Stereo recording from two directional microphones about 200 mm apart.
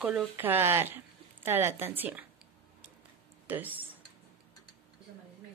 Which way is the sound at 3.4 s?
10° right (ahead or behind).